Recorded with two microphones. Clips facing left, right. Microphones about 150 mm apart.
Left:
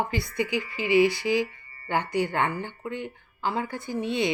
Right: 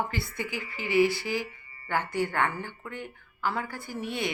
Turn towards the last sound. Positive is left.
turn(degrees=20)  # may be behind; listen again after turning